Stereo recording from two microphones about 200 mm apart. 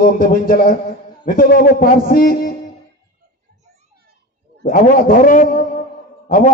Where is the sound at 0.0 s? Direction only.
45° left (ahead or behind).